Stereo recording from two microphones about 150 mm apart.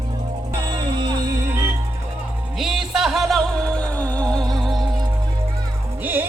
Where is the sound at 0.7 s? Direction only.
30° right (ahead or behind).